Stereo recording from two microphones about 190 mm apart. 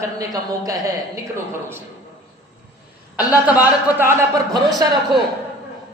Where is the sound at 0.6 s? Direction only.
15° right (ahead or behind).